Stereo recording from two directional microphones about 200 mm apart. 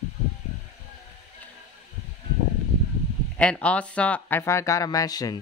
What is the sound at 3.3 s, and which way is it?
Speech, 5° left (ahead or behind).